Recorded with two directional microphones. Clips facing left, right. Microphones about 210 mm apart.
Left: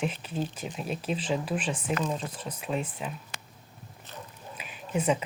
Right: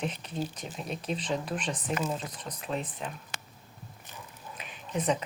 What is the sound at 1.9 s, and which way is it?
Speech, 5° right (ahead or behind).